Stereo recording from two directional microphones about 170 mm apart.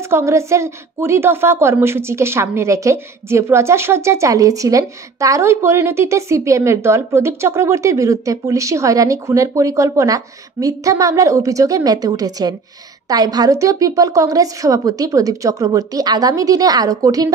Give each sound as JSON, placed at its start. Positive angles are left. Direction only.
{"t": 0.1, "sound": "a woman's voice", "side_deg": -15}